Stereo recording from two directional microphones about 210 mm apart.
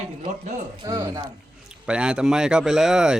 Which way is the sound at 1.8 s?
5° right (ahead or behind).